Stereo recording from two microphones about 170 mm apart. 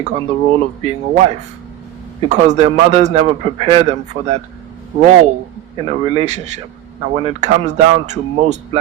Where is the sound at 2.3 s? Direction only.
45° right (ahead or behind).